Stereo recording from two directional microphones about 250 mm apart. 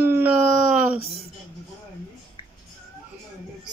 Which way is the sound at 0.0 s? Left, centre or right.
Centre.